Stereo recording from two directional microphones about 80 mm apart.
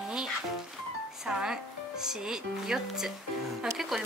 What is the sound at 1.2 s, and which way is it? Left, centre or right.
Music, centre.